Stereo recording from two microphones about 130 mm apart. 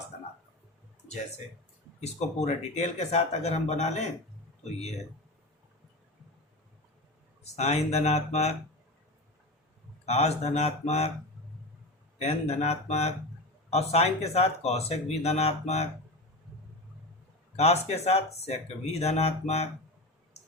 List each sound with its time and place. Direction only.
2.4 s speech: 60° left (ahead or behind)
7.5 s speech: 55° left (ahead or behind)
10.1 s speech: 55° left (ahead or behind)
12.2 s speech: 55° left (ahead or behind)
17.6 s speech: 55° left (ahead or behind)